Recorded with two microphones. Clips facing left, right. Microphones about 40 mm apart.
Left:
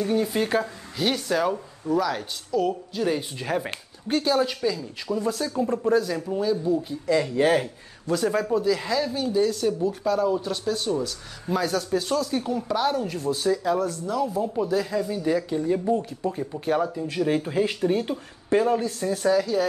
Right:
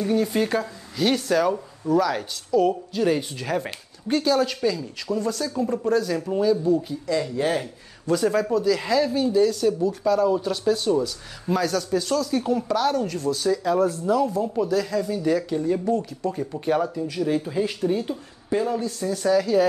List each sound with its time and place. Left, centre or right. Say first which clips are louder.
0.0 s speech: right 2 dB; centre
4.6 s speech: right 2 dB; centre
5.1 s speech: even; centre
7.1 s speech: left 3 dB; left
8.1 s speech: right 2 dB; centre
14.1 s speech: even; centre
14.7 s speech: right 1 dB; centre
16.3 s speech: right 2 dB; centre
17.1 s speech: even; left
19.2 s speech: right 2 dB; centre